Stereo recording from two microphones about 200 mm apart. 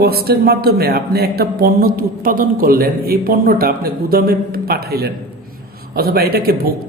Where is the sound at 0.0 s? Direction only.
50° right (ahead or behind).